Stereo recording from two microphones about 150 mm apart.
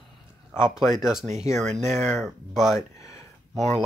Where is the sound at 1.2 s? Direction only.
50° right (ahead or behind).